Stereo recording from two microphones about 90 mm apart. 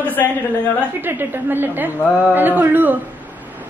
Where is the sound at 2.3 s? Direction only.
20° right (ahead or behind).